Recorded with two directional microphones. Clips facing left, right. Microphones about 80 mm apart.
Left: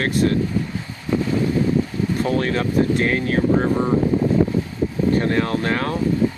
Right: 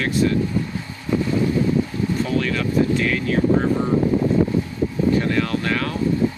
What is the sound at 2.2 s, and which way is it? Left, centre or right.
Speech, left.